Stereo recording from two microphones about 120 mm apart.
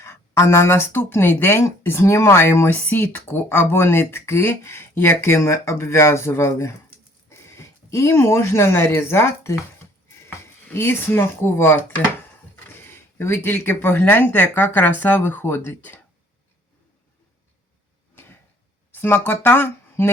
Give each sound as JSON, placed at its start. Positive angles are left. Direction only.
{"t": 0.0, "sound": "speech", "side_deg": 20}
{"t": 18.1, "sound": "a sound", "side_deg": 15}
{"t": 18.9, "sound": "speech", "side_deg": 15}